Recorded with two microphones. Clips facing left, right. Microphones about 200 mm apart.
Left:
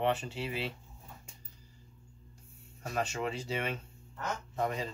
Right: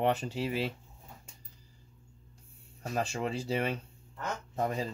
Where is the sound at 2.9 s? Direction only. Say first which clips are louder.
Right 1 dB; 35° right (ahead or behind).